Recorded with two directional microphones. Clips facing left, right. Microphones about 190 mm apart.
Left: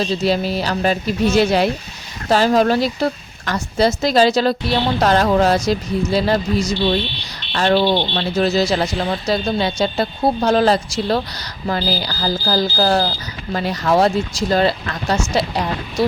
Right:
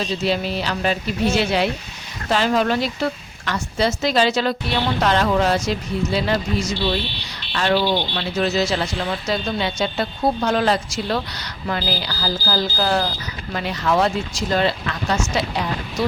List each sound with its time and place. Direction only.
0.0 s a woman's voice: 35° left (ahead or behind)